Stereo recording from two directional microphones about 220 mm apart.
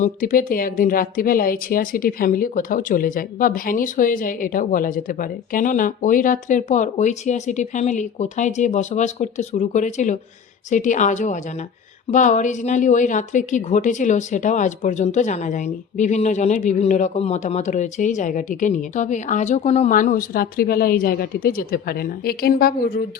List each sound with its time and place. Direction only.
0.0 s a woman's voice: 40° left (ahead or behind)